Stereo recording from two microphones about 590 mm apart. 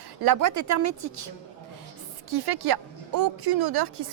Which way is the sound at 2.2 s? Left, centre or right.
Right.